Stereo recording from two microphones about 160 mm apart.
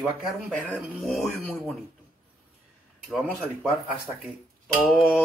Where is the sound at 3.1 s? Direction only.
5° right (ahead or behind).